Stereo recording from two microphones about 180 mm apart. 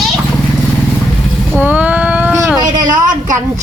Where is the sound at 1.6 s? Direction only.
10° right (ahead or behind).